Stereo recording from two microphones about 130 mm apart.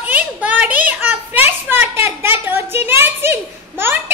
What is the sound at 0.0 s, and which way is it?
Children playing, 10° right (ahead or behind).